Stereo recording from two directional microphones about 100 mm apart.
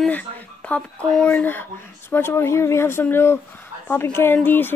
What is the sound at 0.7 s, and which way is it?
Speech, 15° left (ahead or behind).